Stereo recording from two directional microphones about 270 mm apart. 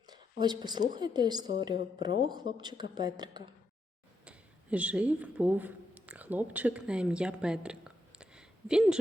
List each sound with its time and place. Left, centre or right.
0.1 s a woman's voice: centre
4.3 s speech: centre